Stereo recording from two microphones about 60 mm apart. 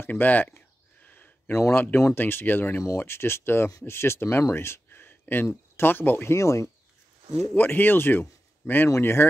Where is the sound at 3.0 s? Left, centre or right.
Left.